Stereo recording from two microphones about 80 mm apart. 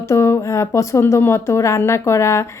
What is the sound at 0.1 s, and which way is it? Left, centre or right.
A woman's voice, left.